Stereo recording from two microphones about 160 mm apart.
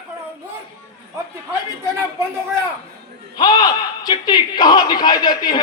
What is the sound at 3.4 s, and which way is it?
A man's voice, 25° left (ahead or behind).